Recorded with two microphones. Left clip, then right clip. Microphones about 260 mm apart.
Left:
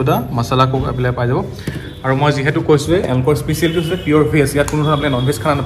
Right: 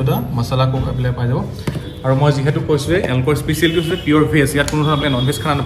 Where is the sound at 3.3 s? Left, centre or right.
Centre.